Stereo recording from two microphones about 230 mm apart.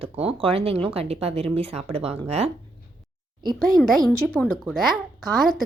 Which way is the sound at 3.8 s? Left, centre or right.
Centre.